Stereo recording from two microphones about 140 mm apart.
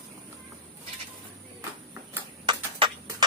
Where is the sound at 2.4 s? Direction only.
30° right (ahead or behind).